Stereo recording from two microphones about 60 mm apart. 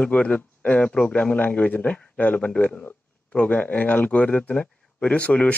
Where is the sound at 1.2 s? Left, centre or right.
Left.